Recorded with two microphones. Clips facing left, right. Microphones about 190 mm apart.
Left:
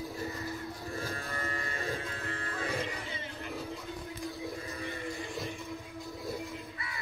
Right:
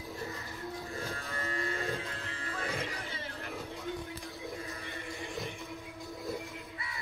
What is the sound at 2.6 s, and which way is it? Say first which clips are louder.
Music: left 2 dB; 15° left (ahead or behind).